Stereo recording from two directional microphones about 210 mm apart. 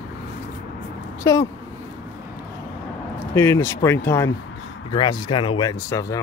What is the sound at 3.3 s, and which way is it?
Speech, 10° left (ahead or behind).